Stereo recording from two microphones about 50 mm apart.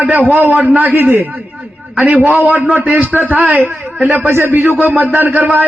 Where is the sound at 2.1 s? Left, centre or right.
Right.